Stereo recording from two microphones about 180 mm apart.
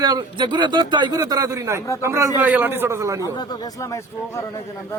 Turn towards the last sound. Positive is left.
turn(degrees=20)  # may be behind; listen again after turning